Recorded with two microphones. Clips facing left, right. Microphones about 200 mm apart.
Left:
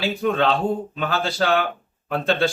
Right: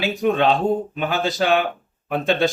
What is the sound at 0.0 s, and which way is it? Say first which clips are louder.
Speech: right 2 dB; 15° right (ahead or behind).